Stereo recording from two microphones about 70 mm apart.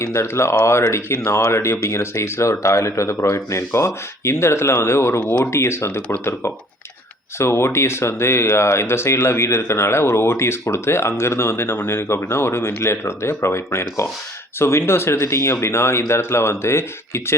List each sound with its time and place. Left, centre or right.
0.0 s speech: left
3.2 s speech: left
5.2 s speech: centre
5.5 s speech: left